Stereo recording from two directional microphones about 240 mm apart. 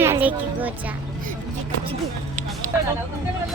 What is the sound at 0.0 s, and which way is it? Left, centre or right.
Music, centre.